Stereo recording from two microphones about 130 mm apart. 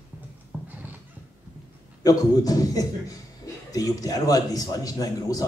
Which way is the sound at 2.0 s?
30° left (ahead or behind).